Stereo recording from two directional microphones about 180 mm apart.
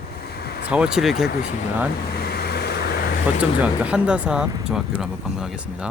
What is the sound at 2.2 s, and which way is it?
Vehicle, 60° left (ahead or behind).